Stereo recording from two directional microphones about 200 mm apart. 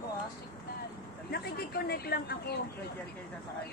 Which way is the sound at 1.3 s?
55° left (ahead or behind).